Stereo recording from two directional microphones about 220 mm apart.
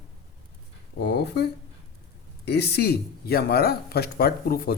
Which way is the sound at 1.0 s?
50° left (ahead or behind).